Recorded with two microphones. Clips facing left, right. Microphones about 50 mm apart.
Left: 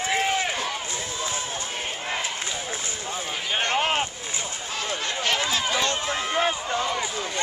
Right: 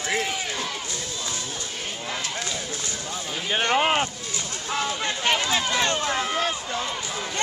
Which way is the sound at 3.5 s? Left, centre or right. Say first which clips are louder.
Right 3 dB; centre.